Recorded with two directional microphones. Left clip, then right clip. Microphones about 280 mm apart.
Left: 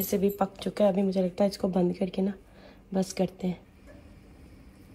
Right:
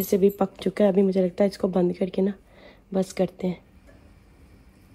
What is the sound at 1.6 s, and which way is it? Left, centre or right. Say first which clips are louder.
Speech: right 4 dB; right.